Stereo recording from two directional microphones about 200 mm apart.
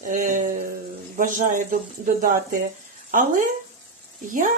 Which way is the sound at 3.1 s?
40° right (ahead or behind).